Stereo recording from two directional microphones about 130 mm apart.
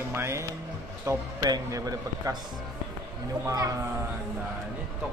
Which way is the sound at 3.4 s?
25° right (ahead or behind).